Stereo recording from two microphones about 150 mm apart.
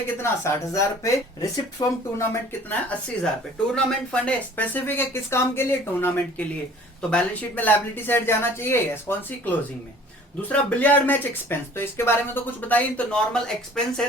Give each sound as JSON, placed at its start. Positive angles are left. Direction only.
{"t": 0.2, "sound": "speech", "side_deg": 20}